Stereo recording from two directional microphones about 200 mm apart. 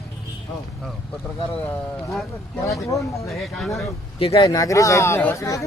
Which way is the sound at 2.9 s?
15° left (ahead or behind).